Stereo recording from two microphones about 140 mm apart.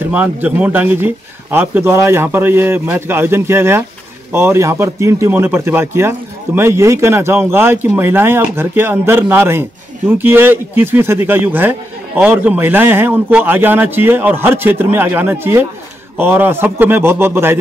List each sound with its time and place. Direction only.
0.1 s a man's voice: 10° right (ahead or behind)